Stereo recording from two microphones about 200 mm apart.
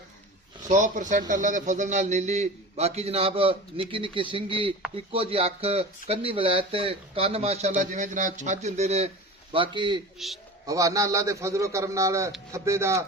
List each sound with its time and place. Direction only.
0.7 s a man's voice: 35° right (ahead or behind)
10.2 s a man's voice: centre (ahead or behind)
10.7 s a man's voice: 15° right (ahead or behind)